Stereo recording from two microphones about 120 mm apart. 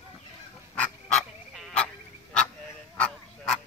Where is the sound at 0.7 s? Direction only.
10° left (ahead or behind).